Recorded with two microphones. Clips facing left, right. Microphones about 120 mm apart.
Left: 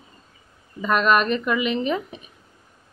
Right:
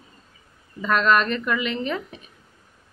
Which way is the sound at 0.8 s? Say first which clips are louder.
Left 1 dB; 15° left (ahead or behind).